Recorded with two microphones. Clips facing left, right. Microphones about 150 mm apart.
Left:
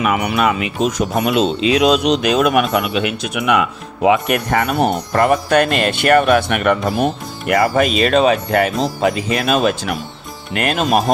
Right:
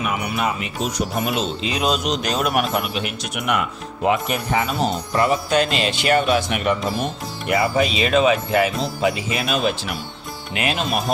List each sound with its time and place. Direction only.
0.0 s speech: 75° left (ahead or behind); by 8.4 s 40° left (ahead or behind)
8.4 s speech: 55° left (ahead or behind)
8.8 s speech: 45° left (ahead or behind)